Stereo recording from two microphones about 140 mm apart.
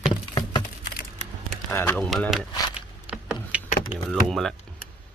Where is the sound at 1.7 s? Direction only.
15° left (ahead or behind).